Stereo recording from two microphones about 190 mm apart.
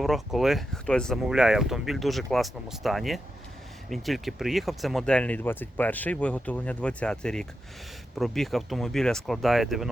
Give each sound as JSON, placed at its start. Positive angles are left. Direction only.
{"t": 0.0, "sound": "speech", "side_deg": 0}